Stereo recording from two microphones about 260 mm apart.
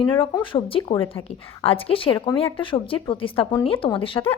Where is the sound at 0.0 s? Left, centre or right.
Centre.